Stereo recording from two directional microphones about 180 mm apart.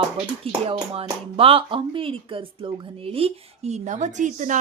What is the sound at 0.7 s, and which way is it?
Speech, 30° right (ahead or behind).